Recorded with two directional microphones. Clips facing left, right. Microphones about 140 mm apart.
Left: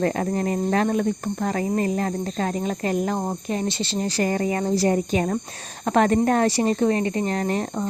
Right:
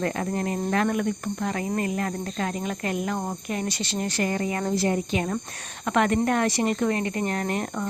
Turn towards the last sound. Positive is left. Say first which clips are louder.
# left 3 dB
turn(degrees=30)  # may be behind; listen again after turning